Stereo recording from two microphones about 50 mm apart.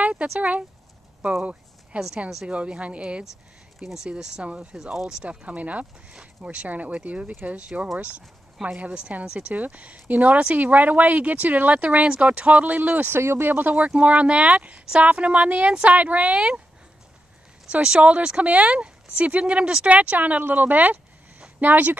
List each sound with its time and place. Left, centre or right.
0.0 s a sound: right
0.4 s speech: right
1.4 s a sound: right
2.1 s speech: right
3.8 s speech: centre
5.2 s speech: right
8.6 s a woman's voice: centre
9.1 s speech: right
13.1 s speech: right
13.7 s speech: right
16.3 s speech: centre
17.6 s speech: centre; by 21.9 s right